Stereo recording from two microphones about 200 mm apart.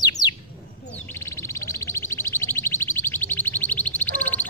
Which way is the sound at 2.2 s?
15° left (ahead or behind).